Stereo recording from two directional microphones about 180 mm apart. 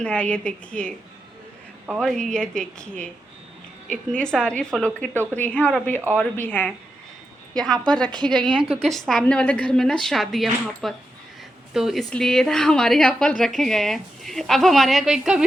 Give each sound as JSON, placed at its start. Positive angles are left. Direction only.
{"t": 0.0, "sound": "a woman's voice", "side_deg": 5}
{"t": 2.0, "sound": "a woman's voice", "side_deg": 5}
{"t": 5.1, "sound": "speech", "side_deg": -15}
{"t": 5.4, "sound": "a woman's voice", "side_deg": 5}
{"t": 8.4, "sound": "a woman's voice", "side_deg": -25}
{"t": 8.9, "sound": "a woman's voice", "side_deg": 0}